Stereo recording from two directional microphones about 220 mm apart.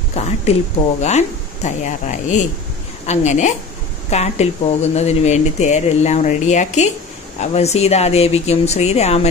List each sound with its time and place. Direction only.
0.1 s speech: 30° left (ahead or behind)